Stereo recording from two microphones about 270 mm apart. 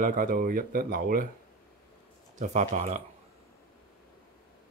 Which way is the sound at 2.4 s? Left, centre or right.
Right.